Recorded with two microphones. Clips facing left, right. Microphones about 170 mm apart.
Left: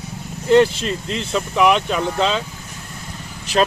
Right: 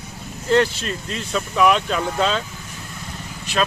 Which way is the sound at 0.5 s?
20° left (ahead or behind).